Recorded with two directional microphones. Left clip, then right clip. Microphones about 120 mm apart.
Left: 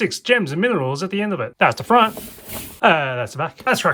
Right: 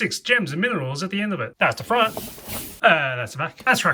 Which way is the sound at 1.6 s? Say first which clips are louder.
Left 5 dB; 40° left (ahead or behind).